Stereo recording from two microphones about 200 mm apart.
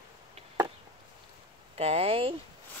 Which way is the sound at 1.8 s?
30° right (ahead or behind).